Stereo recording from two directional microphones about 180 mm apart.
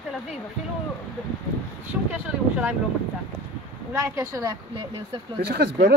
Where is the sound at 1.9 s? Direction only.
10° right (ahead or behind).